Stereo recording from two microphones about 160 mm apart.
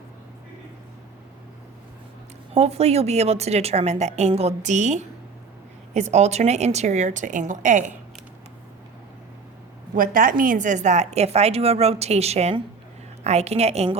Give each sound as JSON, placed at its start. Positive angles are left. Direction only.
{"t": 2.6, "sound": "a woman's voice", "side_deg": -40}
{"t": 9.9, "sound": "a woman's voice", "side_deg": -60}